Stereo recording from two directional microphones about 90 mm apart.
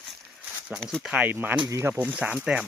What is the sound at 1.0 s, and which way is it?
Speech, 10° right (ahead or behind).